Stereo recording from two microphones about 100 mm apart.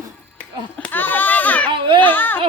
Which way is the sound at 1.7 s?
55° right (ahead or behind).